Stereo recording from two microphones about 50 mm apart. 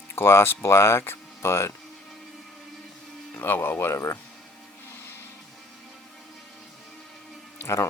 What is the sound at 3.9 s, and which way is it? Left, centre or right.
Speech, left.